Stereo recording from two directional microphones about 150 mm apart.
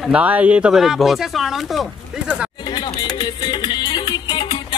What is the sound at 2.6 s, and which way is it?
Music, 30° left (ahead or behind).